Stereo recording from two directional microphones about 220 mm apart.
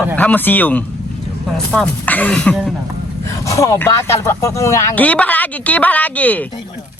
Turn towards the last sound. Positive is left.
turn(degrees=5)  # may be behind; listen again after turning